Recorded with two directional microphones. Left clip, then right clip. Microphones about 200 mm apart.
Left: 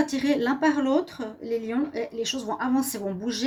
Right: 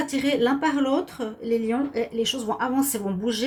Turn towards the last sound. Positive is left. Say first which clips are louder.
# right 3 dB
turn(degrees=30)  # may be behind; listen again after turning